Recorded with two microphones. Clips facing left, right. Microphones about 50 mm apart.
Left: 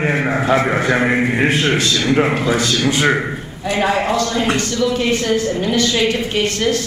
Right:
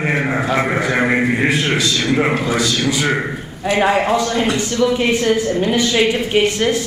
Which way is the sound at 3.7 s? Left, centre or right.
Centre.